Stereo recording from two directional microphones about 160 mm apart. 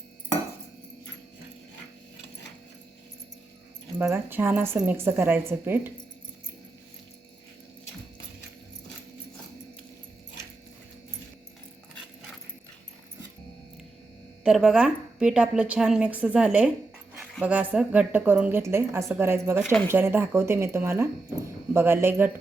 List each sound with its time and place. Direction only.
3.9 s a woman's voice: 10° right (ahead or behind)
14.4 s a woman's voice: 5° right (ahead or behind)
19.6 s speech: 10° left (ahead or behind)
19.9 s a woman's voice: 15° right (ahead or behind)